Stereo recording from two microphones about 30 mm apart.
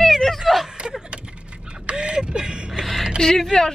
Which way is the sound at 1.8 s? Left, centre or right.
Right.